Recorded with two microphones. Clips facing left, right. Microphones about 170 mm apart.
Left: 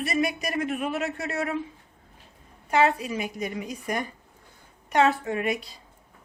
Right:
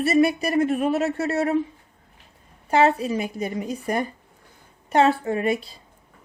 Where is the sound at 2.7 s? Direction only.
30° right (ahead or behind).